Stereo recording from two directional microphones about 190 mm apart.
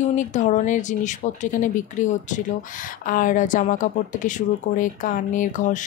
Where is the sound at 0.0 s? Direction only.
40° left (ahead or behind).